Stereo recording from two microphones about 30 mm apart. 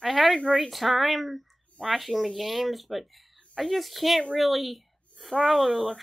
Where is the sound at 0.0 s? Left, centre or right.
Centre.